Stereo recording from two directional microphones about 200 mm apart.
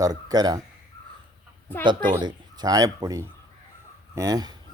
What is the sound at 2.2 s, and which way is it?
Speech, 20° right (ahead or behind).